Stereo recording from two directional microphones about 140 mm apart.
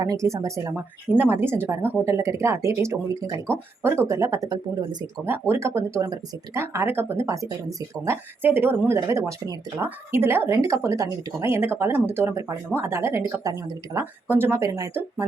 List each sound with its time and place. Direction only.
0.0 s speech: 25° right (ahead or behind)
5.3 s speech: 20° right (ahead or behind)